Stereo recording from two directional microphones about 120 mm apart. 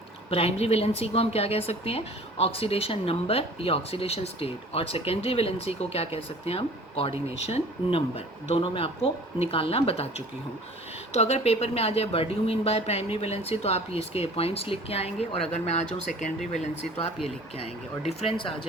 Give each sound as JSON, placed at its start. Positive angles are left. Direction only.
{"t": 0.3, "sound": "a woman's voice", "side_deg": 55}
{"t": 11.1, "sound": "a woman's voice", "side_deg": 65}
{"t": 18.0, "sound": "speech", "side_deg": 55}